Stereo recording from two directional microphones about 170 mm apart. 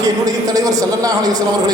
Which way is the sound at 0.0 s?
20° right (ahead or behind).